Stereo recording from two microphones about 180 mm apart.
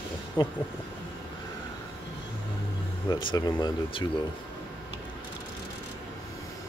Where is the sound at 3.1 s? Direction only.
25° left (ahead or behind).